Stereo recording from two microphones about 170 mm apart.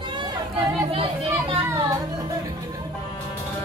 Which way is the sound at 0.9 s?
35° right (ahead or behind).